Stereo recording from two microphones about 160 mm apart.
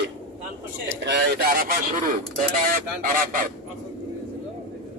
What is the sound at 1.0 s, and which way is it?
Speech, 70° right (ahead or behind).